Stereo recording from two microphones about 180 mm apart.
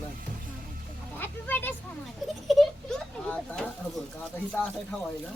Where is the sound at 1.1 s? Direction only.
10° left (ahead or behind).